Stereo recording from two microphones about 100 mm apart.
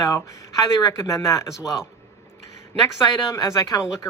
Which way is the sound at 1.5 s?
5° right (ahead or behind).